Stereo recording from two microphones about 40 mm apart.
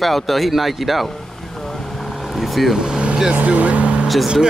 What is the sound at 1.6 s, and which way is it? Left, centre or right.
Vehicle, centre.